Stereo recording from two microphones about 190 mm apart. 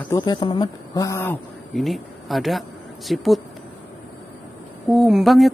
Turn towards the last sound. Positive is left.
turn(degrees=0)  # may be behind; listen again after turning